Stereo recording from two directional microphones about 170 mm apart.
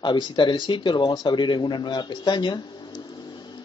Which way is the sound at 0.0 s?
25° left (ahead or behind).